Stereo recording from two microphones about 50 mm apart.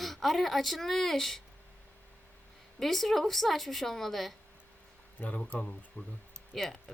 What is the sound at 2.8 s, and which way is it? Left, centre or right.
Speech, centre.